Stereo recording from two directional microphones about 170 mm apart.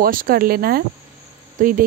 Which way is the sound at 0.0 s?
55° right (ahead or behind).